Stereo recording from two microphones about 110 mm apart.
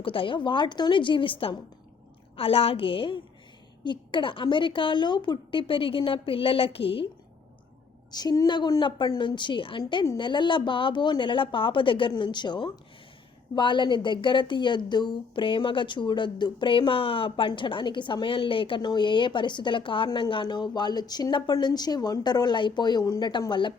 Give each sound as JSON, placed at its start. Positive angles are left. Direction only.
{"t": 0.0, "sound": "a woman's voice", "side_deg": 50}
{"t": 8.1, "sound": "a woman's voice", "side_deg": 35}